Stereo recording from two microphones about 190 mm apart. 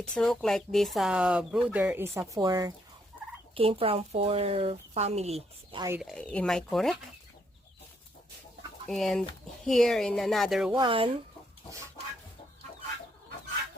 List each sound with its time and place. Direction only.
0.0 s speech: 5° left (ahead or behind); by 5.8 s 35° right (ahead or behind)
6.0 s speech: 5° left (ahead or behind)
8.9 s speech: centre (ahead or behind)
10.7 s speech: 25° right (ahead or behind)